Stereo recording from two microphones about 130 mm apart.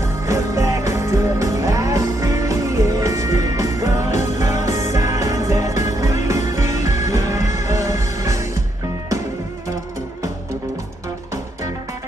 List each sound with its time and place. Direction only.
0.3 s music: 25° right (ahead or behind)